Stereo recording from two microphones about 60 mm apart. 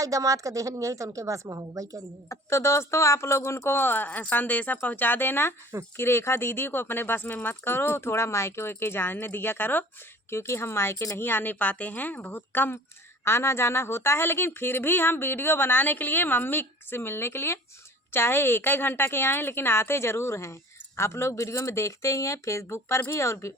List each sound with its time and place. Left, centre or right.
0.0 s a woman's voice: right
2.3 s a woman's voice: left
11.2 s a woman's voice: left
13.2 s a woman's voice: left